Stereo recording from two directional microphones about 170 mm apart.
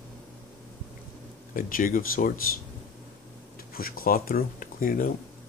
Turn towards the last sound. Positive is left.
turn(degrees=55)  # may be behind; listen again after turning